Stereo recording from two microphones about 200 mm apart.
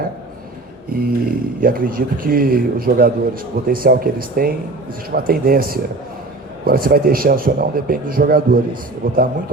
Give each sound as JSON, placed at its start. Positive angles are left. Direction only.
{"t": 0.9, "sound": "speech", "side_deg": -45}